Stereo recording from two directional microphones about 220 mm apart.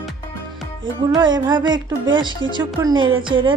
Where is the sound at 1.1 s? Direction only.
20° right (ahead or behind).